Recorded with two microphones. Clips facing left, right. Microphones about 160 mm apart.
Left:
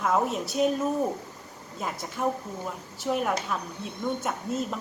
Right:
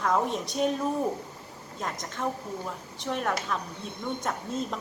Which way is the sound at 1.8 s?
5° left (ahead or behind).